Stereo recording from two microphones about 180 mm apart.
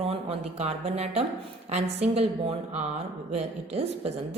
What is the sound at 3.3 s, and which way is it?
Speech, 35° right (ahead or behind).